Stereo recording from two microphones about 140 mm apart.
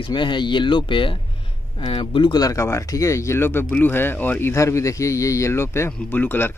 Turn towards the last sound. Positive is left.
turn(degrees=15)  # may be behind; listen again after turning